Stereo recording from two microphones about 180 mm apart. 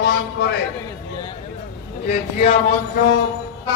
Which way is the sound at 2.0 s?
35° left (ahead or behind).